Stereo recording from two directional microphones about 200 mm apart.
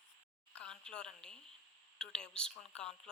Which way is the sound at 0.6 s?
5° left (ahead or behind).